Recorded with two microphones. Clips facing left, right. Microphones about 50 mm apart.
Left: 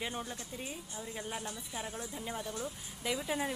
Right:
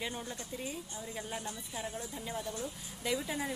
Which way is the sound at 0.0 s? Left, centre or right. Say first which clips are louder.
Even; centre.